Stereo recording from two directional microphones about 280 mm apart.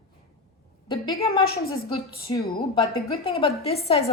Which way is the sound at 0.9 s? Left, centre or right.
Centre.